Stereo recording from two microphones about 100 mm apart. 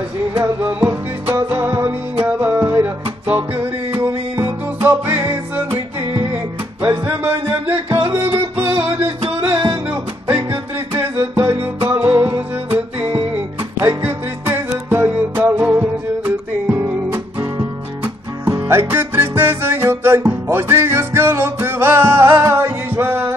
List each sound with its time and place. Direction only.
0.3 s music: 20° right (ahead or behind)
17.1 s music: 25° right (ahead or behind)